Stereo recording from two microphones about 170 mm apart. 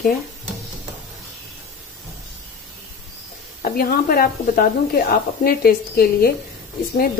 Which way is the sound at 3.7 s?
60° left (ahead or behind).